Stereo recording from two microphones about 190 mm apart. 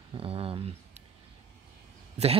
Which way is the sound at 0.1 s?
30° right (ahead or behind).